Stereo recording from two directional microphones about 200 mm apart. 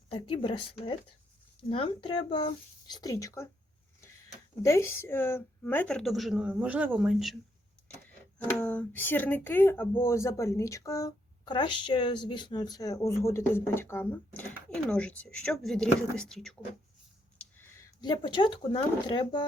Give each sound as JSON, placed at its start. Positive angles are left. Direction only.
{"t": 0.1, "sound": "speech", "side_deg": 25}
{"t": 4.6, "sound": "a woman's voice", "side_deg": 15}
{"t": 8.4, "sound": "speech", "side_deg": 10}
{"t": 17.3, "sound": "speech", "side_deg": 15}